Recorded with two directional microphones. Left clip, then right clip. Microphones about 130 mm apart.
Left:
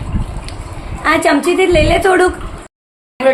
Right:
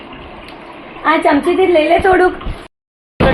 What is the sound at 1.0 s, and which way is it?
A woman's voice, 20° left (ahead or behind).